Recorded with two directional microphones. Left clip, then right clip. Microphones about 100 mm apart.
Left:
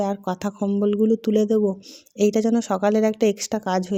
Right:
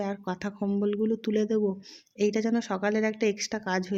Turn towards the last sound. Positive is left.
turn(degrees=50)  # may be behind; listen again after turning